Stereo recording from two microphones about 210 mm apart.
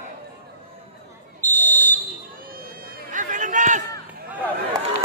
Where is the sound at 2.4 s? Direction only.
45° right (ahead or behind).